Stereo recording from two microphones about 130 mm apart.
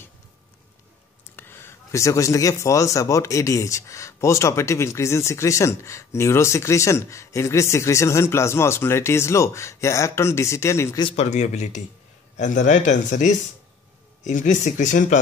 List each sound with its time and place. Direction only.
1.2 s speech: 20° left (ahead or behind)
11.1 s speech: 60° left (ahead or behind)